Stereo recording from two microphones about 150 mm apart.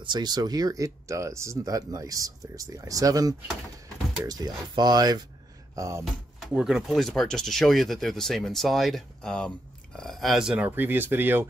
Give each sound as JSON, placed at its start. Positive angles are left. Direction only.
{"t": 0.0, "sound": "speech", "side_deg": -30}
{"t": 6.0, "sound": "speech", "side_deg": 0}